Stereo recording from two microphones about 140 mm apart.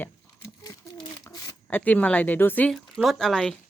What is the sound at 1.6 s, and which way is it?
Speech, 10° left (ahead or behind).